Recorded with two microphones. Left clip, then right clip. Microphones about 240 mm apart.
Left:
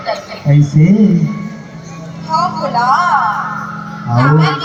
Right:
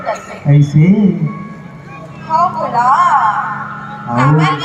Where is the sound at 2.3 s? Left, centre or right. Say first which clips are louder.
Right 2 dB; right.